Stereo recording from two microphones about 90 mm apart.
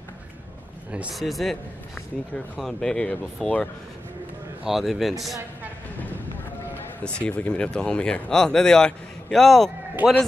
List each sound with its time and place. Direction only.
1.1 s speech: centre (ahead or behind)
3.4 s speech: centre (ahead or behind)
4.6 s speech: 5° right (ahead or behind)
7.0 s speech: 10° left (ahead or behind)
10.0 s a man's voice: 20° right (ahead or behind)